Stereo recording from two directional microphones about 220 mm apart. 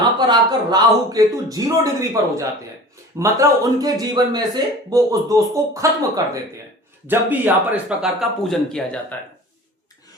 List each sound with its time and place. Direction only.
0.0 s speech: 20° right (ahead or behind)
3.2 s a man's voice: 15° right (ahead or behind); by 9.1 s 5° left (ahead or behind)